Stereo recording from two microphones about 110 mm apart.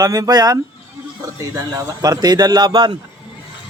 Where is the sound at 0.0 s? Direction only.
35° right (ahead or behind).